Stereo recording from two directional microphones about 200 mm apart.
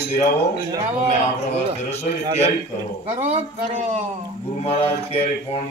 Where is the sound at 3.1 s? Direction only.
35° right (ahead or behind).